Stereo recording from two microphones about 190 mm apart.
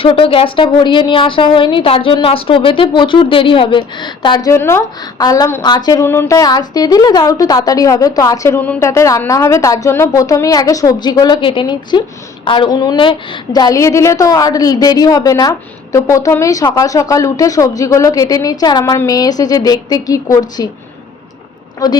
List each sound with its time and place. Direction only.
0.0 s a woman's voice: 30° left (ahead or behind)
21.8 s a woman's voice: 20° left (ahead or behind)